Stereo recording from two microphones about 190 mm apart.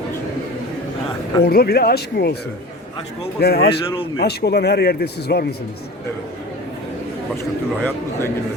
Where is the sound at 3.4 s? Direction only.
55° left (ahead or behind).